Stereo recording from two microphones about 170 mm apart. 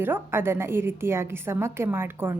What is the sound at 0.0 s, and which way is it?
A woman's voice, 15° right (ahead or behind).